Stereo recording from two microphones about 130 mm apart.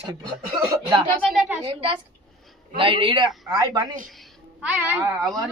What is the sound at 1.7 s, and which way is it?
A man's voice, 40° right (ahead or behind).